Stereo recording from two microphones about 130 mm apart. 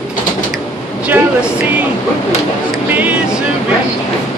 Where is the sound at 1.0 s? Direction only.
10° right (ahead or behind).